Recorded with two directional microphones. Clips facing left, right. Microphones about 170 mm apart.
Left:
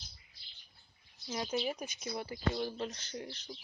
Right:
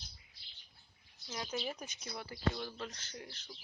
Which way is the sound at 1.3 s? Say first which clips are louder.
Left 5 dB; 25° left (ahead or behind).